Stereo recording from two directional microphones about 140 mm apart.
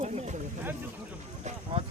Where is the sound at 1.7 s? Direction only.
45° right (ahead or behind).